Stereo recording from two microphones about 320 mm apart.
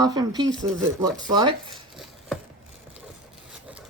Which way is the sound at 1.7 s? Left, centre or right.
Centre.